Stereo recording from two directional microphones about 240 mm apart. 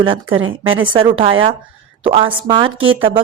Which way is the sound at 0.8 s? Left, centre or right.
Right.